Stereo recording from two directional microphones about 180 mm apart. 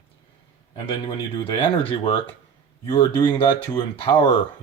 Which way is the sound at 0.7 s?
30° left (ahead or behind).